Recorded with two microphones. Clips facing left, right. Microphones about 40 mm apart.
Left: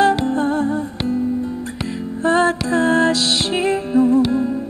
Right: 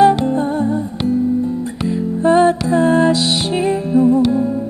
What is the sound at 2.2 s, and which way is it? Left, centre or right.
Music, centre.